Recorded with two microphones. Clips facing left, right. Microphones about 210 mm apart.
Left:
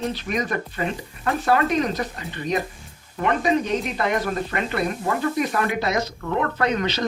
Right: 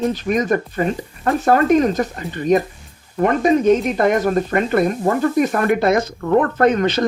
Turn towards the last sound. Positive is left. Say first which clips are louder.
# right 8 dB
turn(degrees=-50)  # may be behind; listen again after turning